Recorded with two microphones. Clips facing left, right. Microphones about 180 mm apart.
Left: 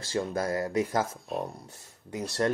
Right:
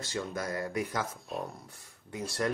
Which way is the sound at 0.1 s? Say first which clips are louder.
Left 6 dB; 30° left (ahead or behind).